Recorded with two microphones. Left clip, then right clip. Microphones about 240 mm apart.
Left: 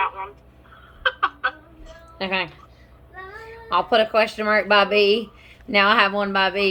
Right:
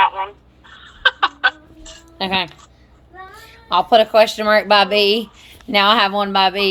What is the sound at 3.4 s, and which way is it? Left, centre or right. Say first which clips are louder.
Speech: right 4 dB; right.